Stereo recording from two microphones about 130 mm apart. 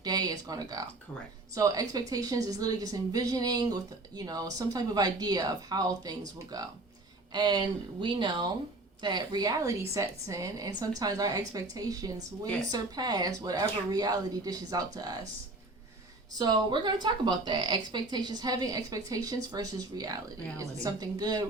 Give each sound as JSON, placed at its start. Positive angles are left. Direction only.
{"t": 0.0, "sound": "a woman's voice", "side_deg": -30}
{"t": 16.4, "sound": "a woman's voice", "side_deg": -35}